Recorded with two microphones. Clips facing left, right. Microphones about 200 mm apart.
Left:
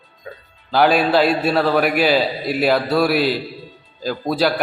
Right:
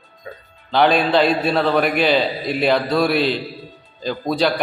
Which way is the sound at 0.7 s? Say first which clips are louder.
Left 1 dB; 5° left (ahead or behind).